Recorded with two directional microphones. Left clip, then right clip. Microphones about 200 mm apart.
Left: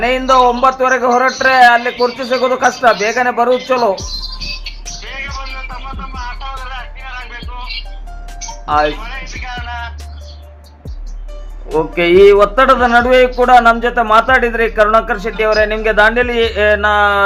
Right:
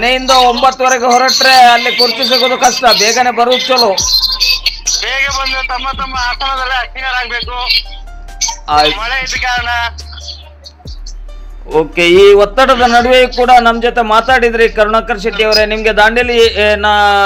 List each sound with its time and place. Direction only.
0.0 s a man's voice: 25° right (ahead or behind)
0.3 s speech: 50° right (ahead or behind)
0.6 s a man's voice: 25° right (ahead or behind)
1.3 s speech: 50° right (ahead or behind)
8.4 s music: 50° right (ahead or behind)
8.8 s speech: 50° right (ahead or behind)
11.8 s a man's voice: 30° right (ahead or behind)